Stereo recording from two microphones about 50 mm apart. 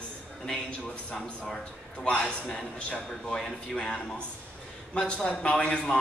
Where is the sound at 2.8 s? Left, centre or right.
Left.